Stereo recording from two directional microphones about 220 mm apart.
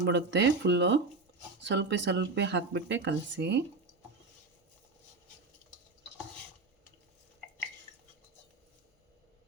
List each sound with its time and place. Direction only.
0.0 s speech: 50° right (ahead or behind)